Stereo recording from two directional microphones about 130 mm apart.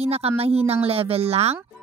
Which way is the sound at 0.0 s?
50° right (ahead or behind).